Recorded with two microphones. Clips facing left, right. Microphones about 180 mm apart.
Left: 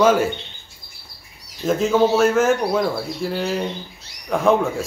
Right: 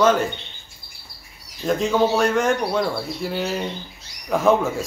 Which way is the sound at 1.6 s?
Centre (ahead or behind).